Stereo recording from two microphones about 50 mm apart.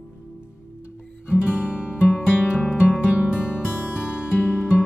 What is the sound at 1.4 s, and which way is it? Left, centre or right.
Music, right.